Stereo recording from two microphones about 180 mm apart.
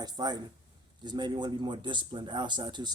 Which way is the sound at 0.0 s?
20° right (ahead or behind).